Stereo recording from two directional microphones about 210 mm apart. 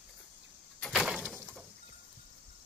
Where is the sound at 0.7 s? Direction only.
Centre (ahead or behind).